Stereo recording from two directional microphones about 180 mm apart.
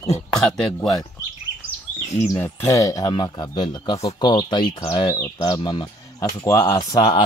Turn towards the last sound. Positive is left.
turn(degrees=25)  # may be behind; listen again after turning